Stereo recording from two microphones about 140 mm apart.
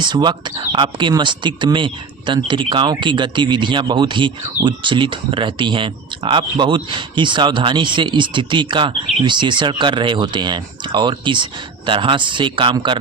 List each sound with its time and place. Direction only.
0.0 s speech: 30° right (ahead or behind)